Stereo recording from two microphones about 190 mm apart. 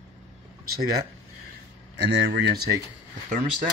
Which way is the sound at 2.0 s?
70° right (ahead or behind).